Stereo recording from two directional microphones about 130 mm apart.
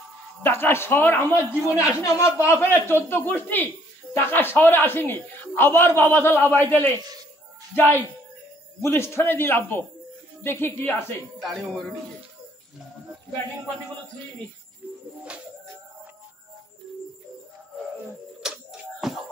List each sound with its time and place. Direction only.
0.4 s speech: 15° left (ahead or behind)
11.3 s speech: centre (ahead or behind)
18.4 s music: 5° right (ahead or behind)